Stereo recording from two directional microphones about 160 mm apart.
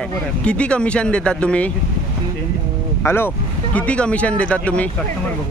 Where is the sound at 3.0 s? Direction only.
15° left (ahead or behind).